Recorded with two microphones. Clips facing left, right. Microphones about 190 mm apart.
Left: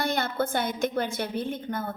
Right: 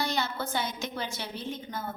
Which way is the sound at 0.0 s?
55° left (ahead or behind).